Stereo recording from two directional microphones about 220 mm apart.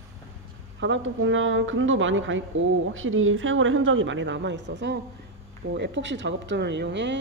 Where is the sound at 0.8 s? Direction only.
60° right (ahead or behind).